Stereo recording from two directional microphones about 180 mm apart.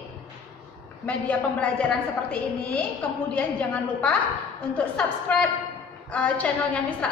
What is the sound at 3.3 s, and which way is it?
Speech, 5° left (ahead or behind).